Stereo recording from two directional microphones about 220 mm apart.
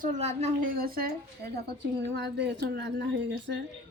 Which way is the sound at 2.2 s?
50° right (ahead or behind).